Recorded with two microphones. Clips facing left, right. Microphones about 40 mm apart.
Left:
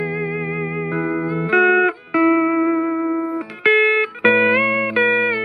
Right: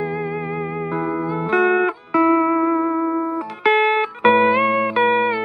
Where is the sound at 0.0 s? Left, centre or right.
Centre.